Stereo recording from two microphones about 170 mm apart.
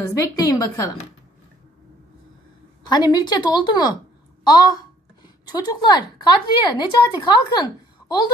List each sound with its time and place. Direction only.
0.0 s speech: 20° left (ahead or behind)
2.9 s speech: 25° left (ahead or behind)